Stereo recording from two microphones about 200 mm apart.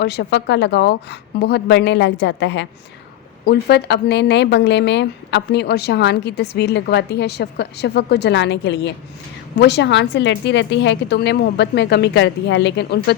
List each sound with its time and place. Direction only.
0.0 s a woman's voice: 55° left (ahead or behind)